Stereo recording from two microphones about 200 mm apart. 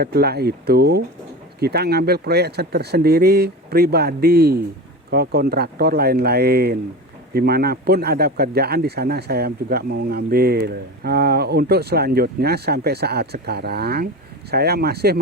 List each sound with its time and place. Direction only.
0.0 s speech: 50° right (ahead or behind)